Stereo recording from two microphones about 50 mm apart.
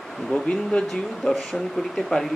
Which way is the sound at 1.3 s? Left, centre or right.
Centre.